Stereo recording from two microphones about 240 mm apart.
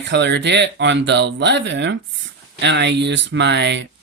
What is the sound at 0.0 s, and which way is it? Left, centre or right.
Speech, right.